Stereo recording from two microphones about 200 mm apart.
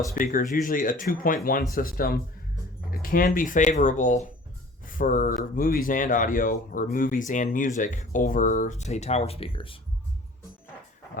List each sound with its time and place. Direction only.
0.1 s speech: 45° left (ahead or behind); by 9.7 s 25° left (ahead or behind)